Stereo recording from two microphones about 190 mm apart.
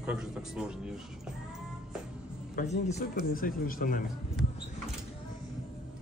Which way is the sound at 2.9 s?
50° left (ahead or behind).